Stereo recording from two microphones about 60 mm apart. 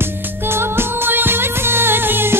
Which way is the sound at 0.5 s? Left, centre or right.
Right.